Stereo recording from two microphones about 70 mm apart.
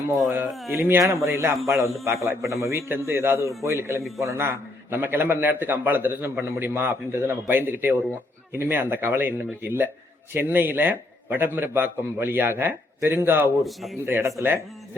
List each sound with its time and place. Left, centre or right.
0.2 s a man's voice: right
0.5 s a man's voice: centre
0.9 s a man's voice: right
13.6 s a man's voice: centre
14.0 s a man's voice: right